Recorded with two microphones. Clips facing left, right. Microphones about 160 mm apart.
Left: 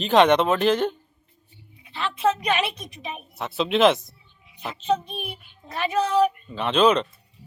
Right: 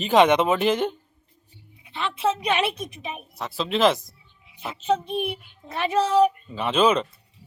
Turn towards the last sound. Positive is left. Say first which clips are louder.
# left 1 dB
turn(degrees=-5)  # may be behind; listen again after turning